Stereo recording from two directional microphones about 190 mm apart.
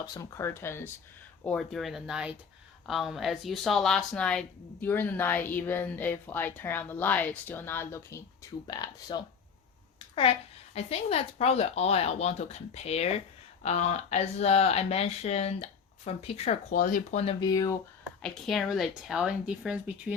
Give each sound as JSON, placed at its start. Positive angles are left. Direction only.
{"t": 0.0, "sound": "speech", "side_deg": 20}
{"t": 1.5, "sound": "speech", "side_deg": 0}
{"t": 10.8, "sound": "speech", "side_deg": 30}
{"t": 16.6, "sound": "speech", "side_deg": 45}
{"t": 17.4, "sound": "speech", "side_deg": 20}
{"t": 18.2, "sound": "speech", "side_deg": 0}